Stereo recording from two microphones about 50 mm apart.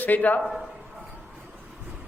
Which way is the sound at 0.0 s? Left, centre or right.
Left.